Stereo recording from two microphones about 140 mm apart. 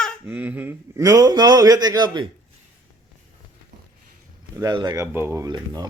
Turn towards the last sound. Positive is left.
turn(degrees=-30)  # may be behind; listen again after turning